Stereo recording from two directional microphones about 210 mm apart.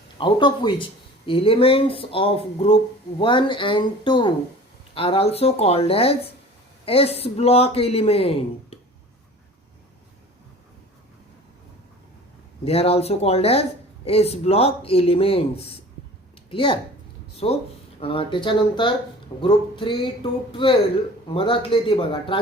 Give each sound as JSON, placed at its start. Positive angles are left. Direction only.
{"t": 0.2, "sound": "a woman's voice", "side_deg": 20}
{"t": 12.6, "sound": "a woman's voice", "side_deg": 30}